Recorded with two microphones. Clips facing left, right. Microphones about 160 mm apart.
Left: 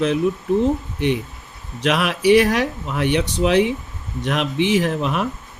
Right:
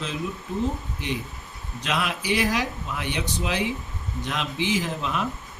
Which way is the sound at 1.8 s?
70° left (ahead or behind).